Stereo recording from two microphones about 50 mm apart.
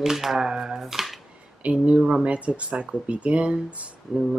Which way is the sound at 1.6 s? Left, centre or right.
Right.